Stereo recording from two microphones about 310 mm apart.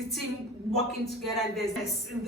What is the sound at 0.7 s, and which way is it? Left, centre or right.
A woman's voice, centre.